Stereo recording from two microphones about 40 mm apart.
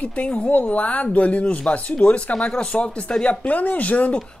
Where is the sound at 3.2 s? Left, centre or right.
Left.